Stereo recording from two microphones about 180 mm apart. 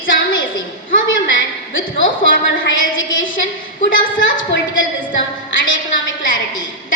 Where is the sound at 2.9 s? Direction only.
90° left.